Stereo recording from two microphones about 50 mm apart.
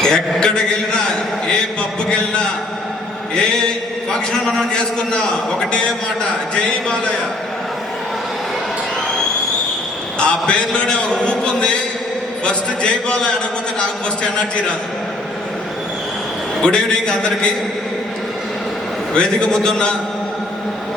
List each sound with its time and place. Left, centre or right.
0.0 s a man's voice: centre
2.0 s a sound: centre
4.3 s a man's voice: centre
10.2 s a man's voice: left
16.6 s a man's voice: centre
19.1 s a man's voice: centre